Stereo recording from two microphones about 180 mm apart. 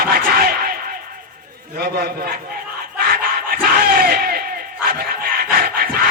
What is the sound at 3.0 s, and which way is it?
Battle cry, 55° right (ahead or behind).